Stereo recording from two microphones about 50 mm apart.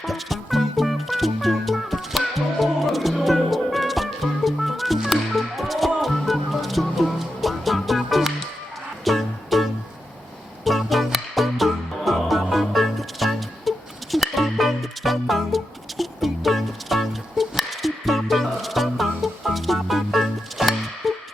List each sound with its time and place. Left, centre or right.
0.0 s music: centre